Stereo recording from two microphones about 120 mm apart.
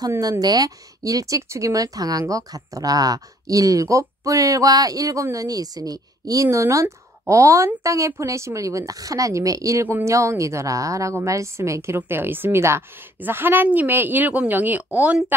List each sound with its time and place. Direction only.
0.0 s speech: 30° right (ahead or behind); by 15.3 s 10° right (ahead or behind)